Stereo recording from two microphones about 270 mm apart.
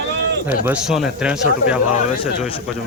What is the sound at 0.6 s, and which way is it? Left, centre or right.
Speech, centre.